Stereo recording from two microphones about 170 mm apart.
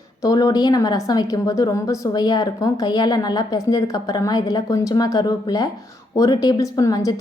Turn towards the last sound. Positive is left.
turn(degrees=20)  # may be behind; listen again after turning